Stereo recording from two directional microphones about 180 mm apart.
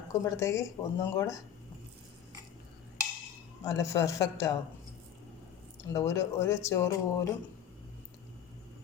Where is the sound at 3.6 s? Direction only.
15° left (ahead or behind).